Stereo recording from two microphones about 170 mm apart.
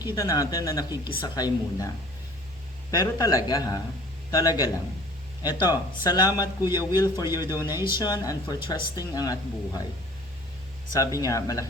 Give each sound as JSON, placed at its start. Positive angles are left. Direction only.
{"t": 0.0, "sound": "speech", "side_deg": 20}
{"t": 2.9, "sound": "speech", "side_deg": 20}
{"t": 10.9, "sound": "speech", "side_deg": 20}